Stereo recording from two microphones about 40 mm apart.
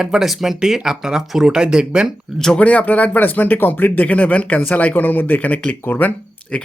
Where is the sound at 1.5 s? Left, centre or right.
Right.